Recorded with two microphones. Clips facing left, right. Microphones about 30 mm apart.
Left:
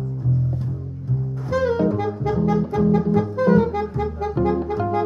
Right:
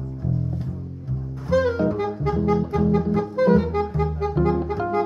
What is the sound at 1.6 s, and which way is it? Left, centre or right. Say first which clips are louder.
Saxophone: left 4 dB; centre.